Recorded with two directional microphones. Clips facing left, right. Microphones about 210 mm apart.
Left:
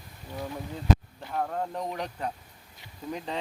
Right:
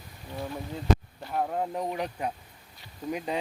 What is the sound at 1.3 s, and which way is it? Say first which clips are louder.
Speech: right 2 dB; 15° right (ahead or behind).